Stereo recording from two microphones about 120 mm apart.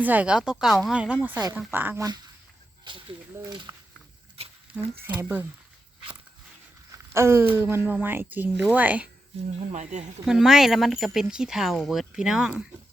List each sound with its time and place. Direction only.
0.0 s speech: 15° right (ahead or behind)
2.9 s speech: 40° right (ahead or behind)
3.7 s a sound: 30° right (ahead or behind)
4.4 s patter: 55° right (ahead or behind)
4.7 s speech: 15° right (ahead or behind)
6.9 s a sound: 20° right (ahead or behind)
7.5 s speech: 20° right (ahead or behind)
9.7 s speech: 75° right (ahead or behind)
10.2 s speech: 5° right (ahead or behind)